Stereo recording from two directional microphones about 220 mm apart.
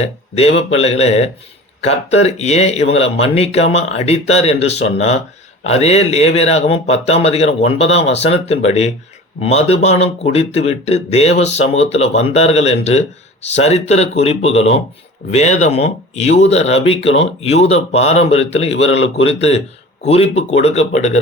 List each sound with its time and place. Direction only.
0.0 s speech: 30° left (ahead or behind)